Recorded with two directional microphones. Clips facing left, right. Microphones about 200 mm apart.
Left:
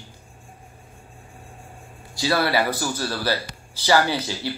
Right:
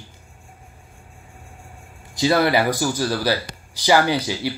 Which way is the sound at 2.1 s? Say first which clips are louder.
Right 4 dB; 20° right (ahead or behind).